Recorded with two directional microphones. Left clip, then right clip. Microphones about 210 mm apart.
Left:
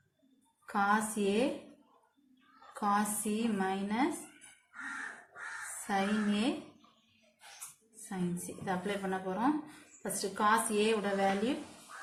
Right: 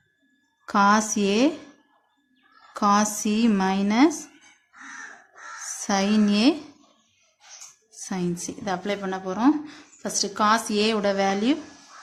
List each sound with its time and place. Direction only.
0.6 s a woman's voice: 45° right (ahead or behind)
2.8 s a woman's voice: 45° right (ahead or behind)
5.9 s a woman's voice: 50° right (ahead or behind)
8.6 s a woman's voice: 50° right (ahead or behind)